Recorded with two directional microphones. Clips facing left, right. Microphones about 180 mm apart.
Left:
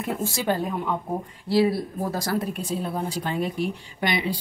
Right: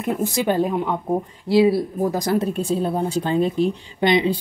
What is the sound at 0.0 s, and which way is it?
Speech, 20° right (ahead or behind).